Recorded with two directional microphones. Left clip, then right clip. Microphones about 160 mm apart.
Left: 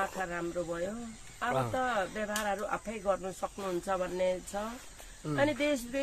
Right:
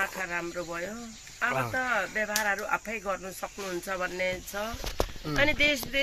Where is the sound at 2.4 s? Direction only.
15° left (ahead or behind).